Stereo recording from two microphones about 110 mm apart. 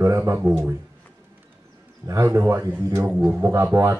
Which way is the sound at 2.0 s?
30° right (ahead or behind).